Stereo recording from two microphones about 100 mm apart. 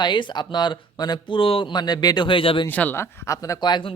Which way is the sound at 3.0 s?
30° left (ahead or behind).